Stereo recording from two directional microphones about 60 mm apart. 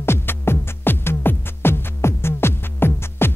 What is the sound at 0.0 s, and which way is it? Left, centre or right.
Music, left.